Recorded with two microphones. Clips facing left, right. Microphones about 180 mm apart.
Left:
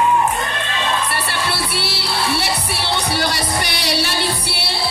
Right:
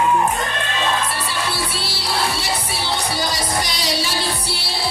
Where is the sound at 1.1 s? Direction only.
65° left (ahead or behind).